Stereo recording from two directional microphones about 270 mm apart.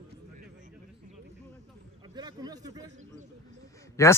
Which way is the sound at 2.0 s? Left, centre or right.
Centre.